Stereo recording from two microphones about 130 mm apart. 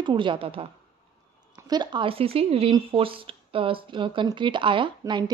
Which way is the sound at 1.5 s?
30° right (ahead or behind).